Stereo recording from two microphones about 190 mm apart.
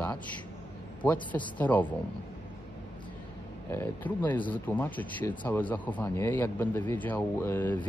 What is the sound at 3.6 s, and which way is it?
Speech, 10° left (ahead or behind).